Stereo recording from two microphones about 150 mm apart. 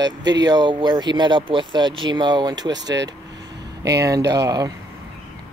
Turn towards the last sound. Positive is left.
turn(degrees=-25)  # may be behind; listen again after turning